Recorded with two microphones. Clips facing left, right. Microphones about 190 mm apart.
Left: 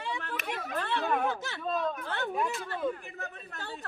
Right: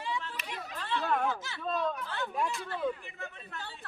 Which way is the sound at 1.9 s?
55° left (ahead or behind).